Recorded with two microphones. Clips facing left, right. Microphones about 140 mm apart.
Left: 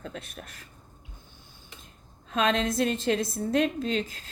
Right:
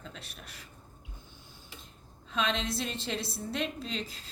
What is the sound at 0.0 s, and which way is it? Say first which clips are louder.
Speech: left 7 dB; 50° left (ahead or behind).